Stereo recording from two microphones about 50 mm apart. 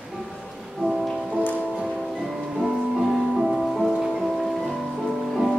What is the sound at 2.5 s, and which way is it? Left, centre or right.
Music, centre.